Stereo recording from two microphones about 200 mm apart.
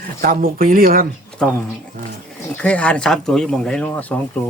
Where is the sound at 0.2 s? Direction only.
45° right (ahead or behind).